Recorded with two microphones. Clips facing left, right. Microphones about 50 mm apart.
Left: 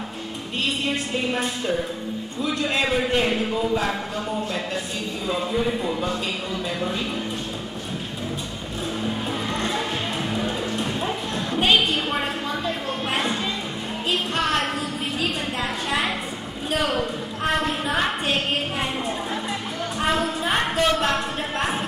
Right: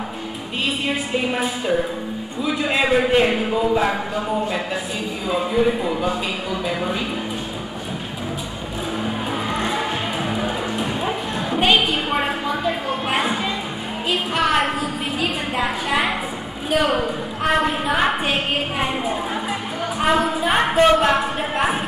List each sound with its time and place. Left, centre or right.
0.8 s a woman's voice: centre
5.3 s a woman's voice: centre
9.0 s music: centre
14.1 s a woman's voice: centre